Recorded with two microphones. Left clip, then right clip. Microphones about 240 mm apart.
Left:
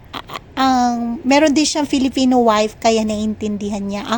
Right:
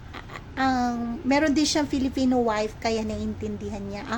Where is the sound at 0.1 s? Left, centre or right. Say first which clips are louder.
Left 10 dB; left.